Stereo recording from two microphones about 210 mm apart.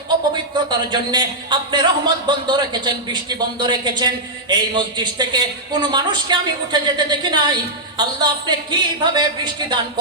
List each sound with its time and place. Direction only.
0.5 s a man's voice: 20° right (ahead or behind)